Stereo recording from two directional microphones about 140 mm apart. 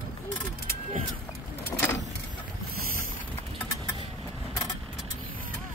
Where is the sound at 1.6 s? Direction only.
15° left (ahead or behind).